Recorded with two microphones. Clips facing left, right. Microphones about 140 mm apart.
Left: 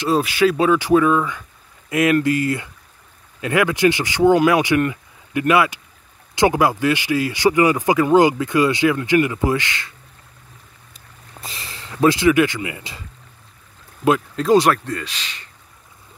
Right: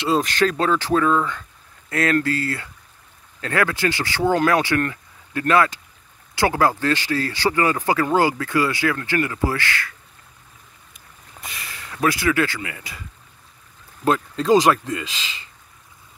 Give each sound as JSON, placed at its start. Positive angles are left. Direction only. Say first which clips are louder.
{"t": 0.1, "sound": "speech", "louder": "left 3 dB", "side_deg": 5}
{"t": 11.4, "sound": "speech", "louder": "left 1 dB", "side_deg": 30}
{"t": 14.0, "sound": "speech", "louder": "left 2 dB", "side_deg": 5}
{"t": 14.7, "sound": "speech", "louder": "even", "side_deg": -5}